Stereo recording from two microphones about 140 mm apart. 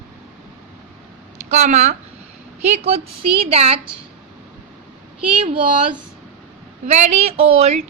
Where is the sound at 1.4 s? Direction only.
55° right (ahead or behind).